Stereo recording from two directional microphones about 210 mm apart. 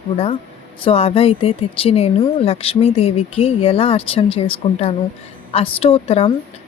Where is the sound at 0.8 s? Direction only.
25° left (ahead or behind).